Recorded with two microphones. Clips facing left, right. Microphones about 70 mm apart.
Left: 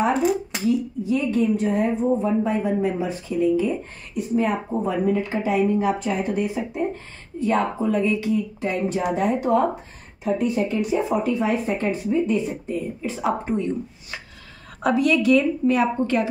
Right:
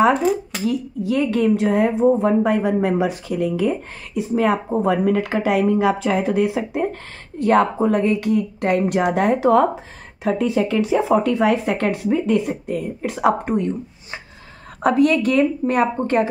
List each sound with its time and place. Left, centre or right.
0.7 s a woman's voice: right
4.2 s speech: right
14.8 s speech: right